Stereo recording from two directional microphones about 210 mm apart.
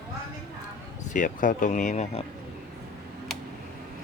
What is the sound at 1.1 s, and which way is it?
Speech, 40° left (ahead or behind).